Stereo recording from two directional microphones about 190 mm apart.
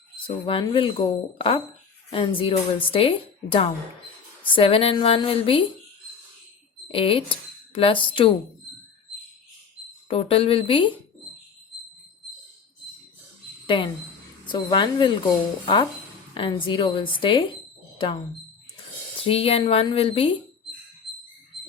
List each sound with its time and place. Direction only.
0.3 s speech: 30° left (ahead or behind)
6.8 s speech: 30° left (ahead or behind)
10.1 s speech: 30° left (ahead or behind)
13.7 s speech: 25° left (ahead or behind)
17.9 s a sound: 30° left (ahead or behind)
19.2 s speech: 30° left (ahead or behind)